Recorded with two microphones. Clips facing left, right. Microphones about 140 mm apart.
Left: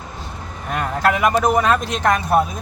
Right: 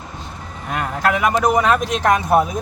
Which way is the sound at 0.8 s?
5° right (ahead or behind).